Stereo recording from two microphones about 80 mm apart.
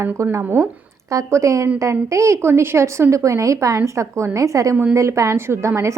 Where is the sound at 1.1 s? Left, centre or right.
Right.